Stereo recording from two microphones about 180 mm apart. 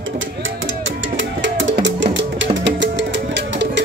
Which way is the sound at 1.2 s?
90° right.